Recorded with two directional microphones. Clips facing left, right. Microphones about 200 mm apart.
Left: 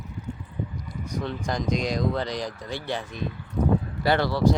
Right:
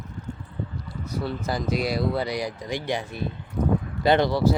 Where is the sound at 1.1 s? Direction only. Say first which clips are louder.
Right 1 dB; 5° right (ahead or behind).